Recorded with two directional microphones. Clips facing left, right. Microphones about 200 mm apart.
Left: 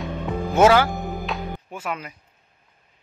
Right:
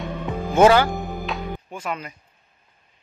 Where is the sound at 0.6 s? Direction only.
5° left (ahead or behind).